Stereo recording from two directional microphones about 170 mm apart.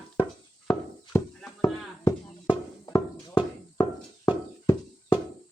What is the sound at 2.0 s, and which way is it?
Music, 25° left (ahead or behind).